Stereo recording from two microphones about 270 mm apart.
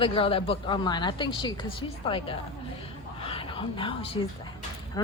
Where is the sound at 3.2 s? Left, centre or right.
Centre.